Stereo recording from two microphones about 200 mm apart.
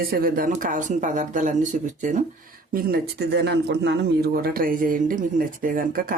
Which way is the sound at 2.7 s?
50° right (ahead or behind).